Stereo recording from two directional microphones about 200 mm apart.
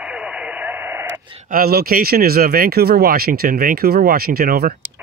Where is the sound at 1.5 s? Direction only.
50° right (ahead or behind).